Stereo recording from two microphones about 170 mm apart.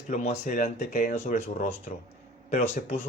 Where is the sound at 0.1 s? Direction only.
45° left (ahead or behind).